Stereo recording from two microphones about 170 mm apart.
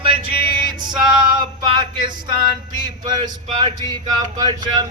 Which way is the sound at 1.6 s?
30° right (ahead or behind).